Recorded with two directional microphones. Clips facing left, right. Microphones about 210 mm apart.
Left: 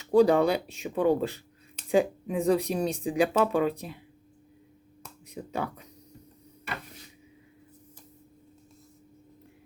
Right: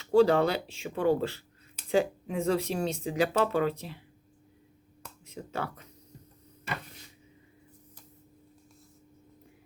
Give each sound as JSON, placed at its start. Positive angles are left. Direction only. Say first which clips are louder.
{"t": 0.0, "sound": "speech", "louder": "left 2 dB", "side_deg": 15}
{"t": 5.3, "sound": "speech", "louder": "left 3 dB", "side_deg": 15}